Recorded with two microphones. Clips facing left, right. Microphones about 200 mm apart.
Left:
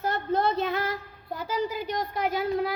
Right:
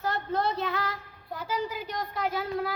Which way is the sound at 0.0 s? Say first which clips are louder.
Left 3 dB; 20° left (ahead or behind).